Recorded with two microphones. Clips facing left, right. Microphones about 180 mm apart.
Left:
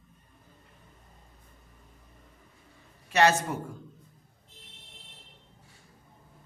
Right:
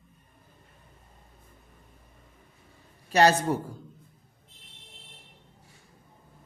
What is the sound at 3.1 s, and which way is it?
Speech, 35° right (ahead or behind).